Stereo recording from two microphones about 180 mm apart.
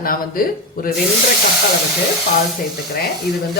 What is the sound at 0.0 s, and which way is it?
Speech, 50° left (ahead or behind).